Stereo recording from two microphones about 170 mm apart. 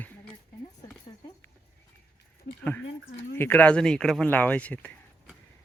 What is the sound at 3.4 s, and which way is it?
A man's voice, 10° left (ahead or behind).